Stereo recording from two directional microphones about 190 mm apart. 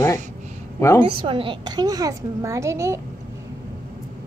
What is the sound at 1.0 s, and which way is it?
A child's voice, 30° right (ahead or behind).